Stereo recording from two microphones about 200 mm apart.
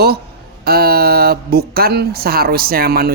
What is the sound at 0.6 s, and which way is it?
Speech, 50° right (ahead or behind).